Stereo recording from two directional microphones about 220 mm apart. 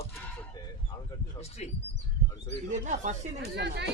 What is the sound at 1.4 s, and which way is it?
Speech, 30° left (ahead or behind).